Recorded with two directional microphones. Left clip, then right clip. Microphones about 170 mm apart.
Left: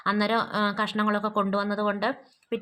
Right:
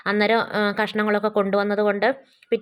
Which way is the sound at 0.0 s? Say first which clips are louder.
Right 5 dB; 20° right (ahead or behind).